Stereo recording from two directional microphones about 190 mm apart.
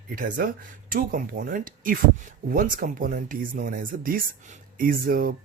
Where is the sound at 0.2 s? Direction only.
45° right (ahead or behind).